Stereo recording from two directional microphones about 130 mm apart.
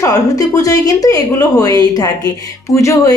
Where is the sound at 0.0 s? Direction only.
30° left (ahead or behind).